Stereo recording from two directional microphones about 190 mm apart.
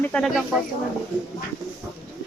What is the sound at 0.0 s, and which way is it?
Speech, 5° left (ahead or behind).